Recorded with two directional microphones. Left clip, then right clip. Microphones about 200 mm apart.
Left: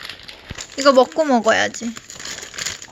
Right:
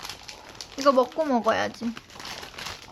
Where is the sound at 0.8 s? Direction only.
30° left (ahead or behind); by 2.0 s 10° left (ahead or behind).